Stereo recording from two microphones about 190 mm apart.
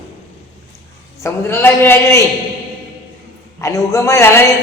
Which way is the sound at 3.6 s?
15° left (ahead or behind).